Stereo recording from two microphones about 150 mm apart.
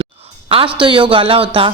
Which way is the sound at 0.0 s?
35° right (ahead or behind).